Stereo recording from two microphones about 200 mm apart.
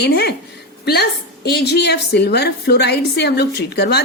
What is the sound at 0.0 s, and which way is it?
Speech, 55° left (ahead or behind).